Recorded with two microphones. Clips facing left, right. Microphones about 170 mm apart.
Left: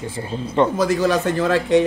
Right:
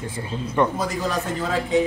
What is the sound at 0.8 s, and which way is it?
Speech, 85° left.